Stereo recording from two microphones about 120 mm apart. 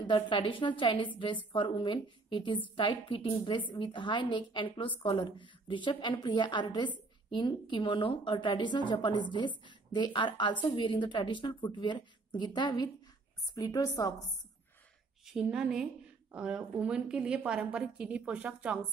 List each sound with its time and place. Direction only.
0.0 s a woman's voice: 45° left (ahead or behind)
15.2 s a woman's voice: 5° right (ahead or behind)